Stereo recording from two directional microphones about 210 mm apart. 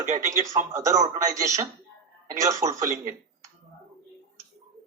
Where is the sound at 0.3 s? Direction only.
15° right (ahead or behind).